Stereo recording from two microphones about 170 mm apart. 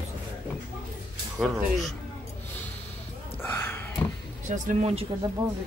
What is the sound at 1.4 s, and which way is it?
Speech, centre (ahead or behind).